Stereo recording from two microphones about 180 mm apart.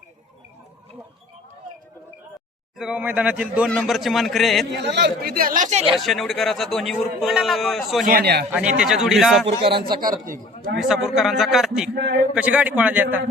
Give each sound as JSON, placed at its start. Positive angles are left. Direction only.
{"t": 2.7, "sound": "a man's voice", "side_deg": -5}
{"t": 4.7, "sound": "speech", "side_deg": -75}
{"t": 5.9, "sound": "a man's voice", "side_deg": 0}
{"t": 8.0, "sound": "a man's voice", "side_deg": -60}
{"t": 8.5, "sound": "a man's voice", "side_deg": -5}
{"t": 9.5, "sound": "a man's voice", "side_deg": -70}
{"t": 10.8, "sound": "a man's voice", "side_deg": 0}